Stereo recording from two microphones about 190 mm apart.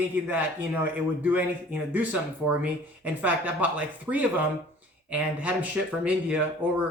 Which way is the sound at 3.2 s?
10° right (ahead or behind).